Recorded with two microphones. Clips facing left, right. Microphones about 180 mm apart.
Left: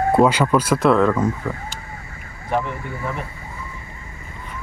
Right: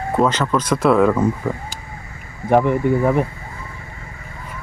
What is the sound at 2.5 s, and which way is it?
Speech, 55° right (ahead or behind).